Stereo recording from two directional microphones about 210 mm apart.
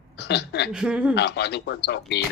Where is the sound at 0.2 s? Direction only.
55° left (ahead or behind).